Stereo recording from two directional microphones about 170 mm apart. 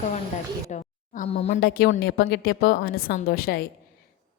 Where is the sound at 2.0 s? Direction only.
70° left (ahead or behind).